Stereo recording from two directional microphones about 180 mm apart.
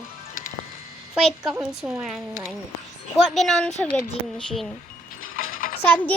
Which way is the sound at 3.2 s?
Centre (ahead or behind).